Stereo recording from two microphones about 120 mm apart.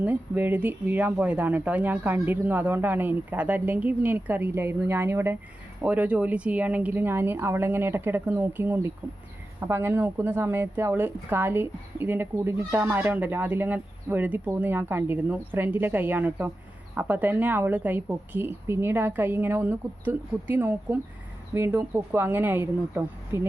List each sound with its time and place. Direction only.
0.0 s a woman's voice: 15° right (ahead or behind)